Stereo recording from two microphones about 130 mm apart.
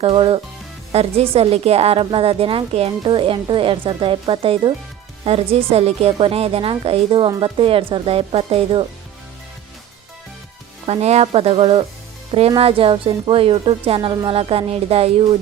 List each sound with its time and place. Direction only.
0.0 s a woman's voice: 45° right (ahead or behind)
10.8 s a woman's voice: 55° right (ahead or behind)